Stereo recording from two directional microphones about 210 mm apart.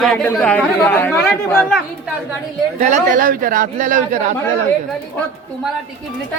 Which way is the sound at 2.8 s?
35° right (ahead or behind).